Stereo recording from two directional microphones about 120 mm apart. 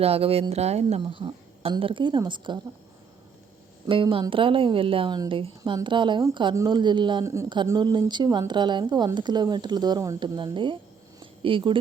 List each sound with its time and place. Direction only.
0.0 s a woman's voice: 55° right (ahead or behind)
3.8 s a woman's voice: 45° right (ahead or behind)
11.2 s a sound: 45° right (ahead or behind)